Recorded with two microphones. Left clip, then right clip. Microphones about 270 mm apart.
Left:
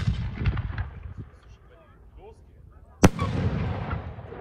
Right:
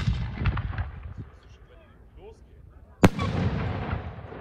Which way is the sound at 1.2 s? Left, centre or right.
Centre.